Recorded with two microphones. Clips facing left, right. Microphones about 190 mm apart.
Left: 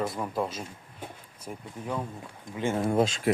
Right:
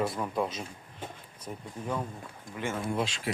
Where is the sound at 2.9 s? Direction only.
50° left (ahead or behind).